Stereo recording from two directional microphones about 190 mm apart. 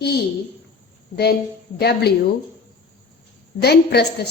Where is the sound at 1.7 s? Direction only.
55° left (ahead or behind).